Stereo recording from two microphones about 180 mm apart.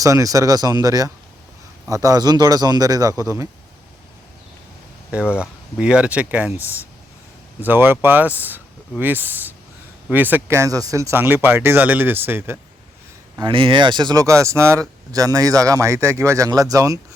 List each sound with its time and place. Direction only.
0.0 s speech: 20° right (ahead or behind)
5.1 s speech: 5° right (ahead or behind)
13.4 s speech: 30° right (ahead or behind)